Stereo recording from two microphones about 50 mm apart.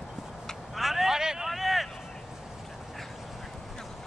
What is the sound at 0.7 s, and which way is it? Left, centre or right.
Vehicle, centre.